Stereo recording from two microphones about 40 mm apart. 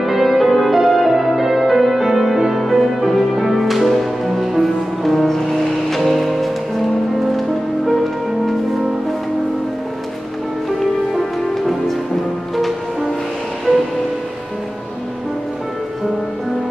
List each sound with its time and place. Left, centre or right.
0.0 s music: centre
10.8 s music: centre